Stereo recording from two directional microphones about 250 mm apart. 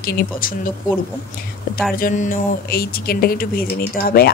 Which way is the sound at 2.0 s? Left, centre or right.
Left.